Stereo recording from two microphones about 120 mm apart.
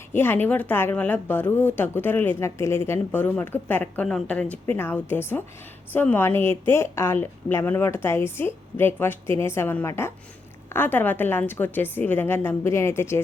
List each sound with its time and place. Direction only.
0.1 s a woman's voice: 15° left (ahead or behind)